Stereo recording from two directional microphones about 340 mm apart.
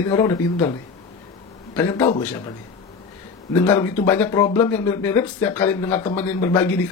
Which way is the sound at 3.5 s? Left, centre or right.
Centre.